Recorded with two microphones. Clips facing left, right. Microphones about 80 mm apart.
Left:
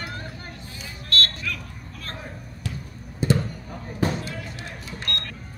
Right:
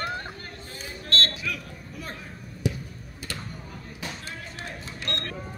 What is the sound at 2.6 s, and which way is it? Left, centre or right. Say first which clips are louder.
Basketball bounce: right 6 dB; centre.